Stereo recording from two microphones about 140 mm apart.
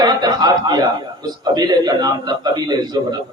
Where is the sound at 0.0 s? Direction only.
30° right (ahead or behind).